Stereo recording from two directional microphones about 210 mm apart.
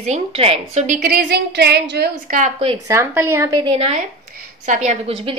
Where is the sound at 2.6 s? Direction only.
25° right (ahead or behind).